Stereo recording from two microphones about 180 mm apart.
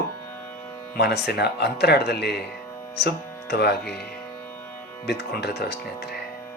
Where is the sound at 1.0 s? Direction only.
65° left (ahead or behind).